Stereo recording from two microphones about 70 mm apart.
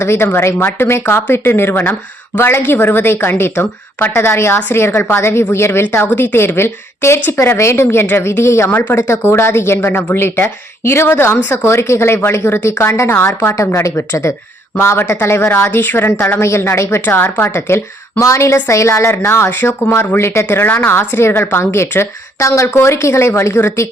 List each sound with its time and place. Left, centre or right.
0.0 s a woman's voice: left
17.1 s a woman's voice: left